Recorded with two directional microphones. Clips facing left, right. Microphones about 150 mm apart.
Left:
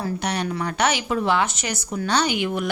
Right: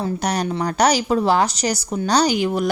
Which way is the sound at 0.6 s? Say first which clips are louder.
Right 7 dB; 40° right (ahead or behind).